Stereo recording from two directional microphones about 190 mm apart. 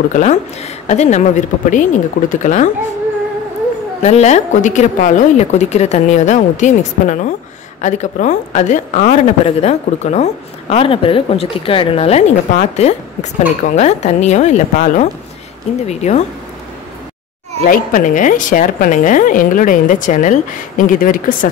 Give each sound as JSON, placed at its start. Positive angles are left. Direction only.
{"t": 0.1, "sound": "a woman's voice", "side_deg": 40}
{"t": 4.0, "sound": "a woman's voice", "side_deg": 35}
{"t": 17.6, "sound": "a woman's voice", "side_deg": 45}